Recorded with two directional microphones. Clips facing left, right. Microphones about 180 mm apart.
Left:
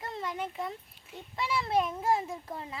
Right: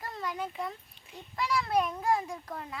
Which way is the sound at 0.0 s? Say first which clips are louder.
Even; 25° left (ahead or behind).